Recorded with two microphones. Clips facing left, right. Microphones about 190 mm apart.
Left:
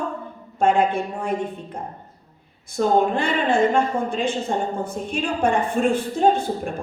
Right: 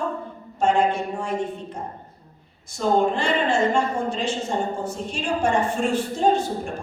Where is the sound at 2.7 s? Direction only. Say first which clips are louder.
Left 2 dB; 55° left (ahead or behind).